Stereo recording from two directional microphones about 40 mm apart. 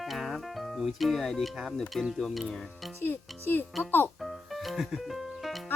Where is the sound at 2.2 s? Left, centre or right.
Centre.